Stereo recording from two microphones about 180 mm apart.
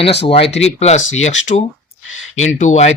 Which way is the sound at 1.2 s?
40° left (ahead or behind).